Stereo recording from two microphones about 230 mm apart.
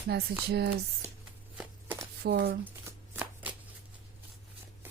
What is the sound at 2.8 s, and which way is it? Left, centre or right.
Shuffling cards, centre.